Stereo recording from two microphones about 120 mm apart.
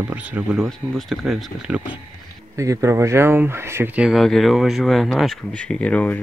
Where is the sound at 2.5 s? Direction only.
25° right (ahead or behind).